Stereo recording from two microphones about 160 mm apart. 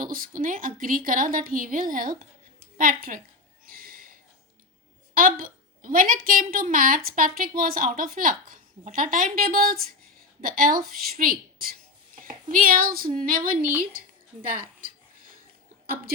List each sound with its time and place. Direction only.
0.0 s a woman's voice: 60° right (ahead or behind)
3.8 s a sound: 60° right (ahead or behind)
5.1 s a woman's voice: 60° right (ahead or behind)